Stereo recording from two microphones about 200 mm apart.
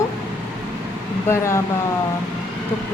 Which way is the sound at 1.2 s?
15° left (ahead or behind).